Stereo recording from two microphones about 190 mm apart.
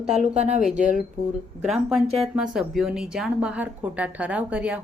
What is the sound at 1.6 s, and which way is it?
A woman's voice, centre (ahead or behind).